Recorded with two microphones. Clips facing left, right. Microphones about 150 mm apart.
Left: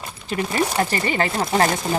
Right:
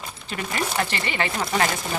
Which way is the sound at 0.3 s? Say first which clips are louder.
Left 6 dB; 35° left (ahead or behind).